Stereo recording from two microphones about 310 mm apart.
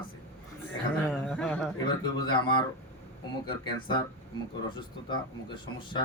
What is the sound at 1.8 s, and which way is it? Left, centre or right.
Speech, centre.